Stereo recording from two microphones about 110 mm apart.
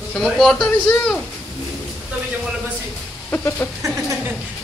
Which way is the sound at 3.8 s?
30° right (ahead or behind).